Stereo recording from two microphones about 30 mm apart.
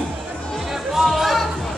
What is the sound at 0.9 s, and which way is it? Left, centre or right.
Music, centre.